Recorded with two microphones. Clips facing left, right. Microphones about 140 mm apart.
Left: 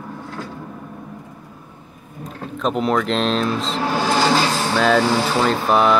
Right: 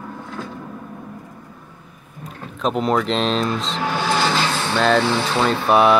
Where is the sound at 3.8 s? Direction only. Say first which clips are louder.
Left 2 dB; 40° left (ahead or behind).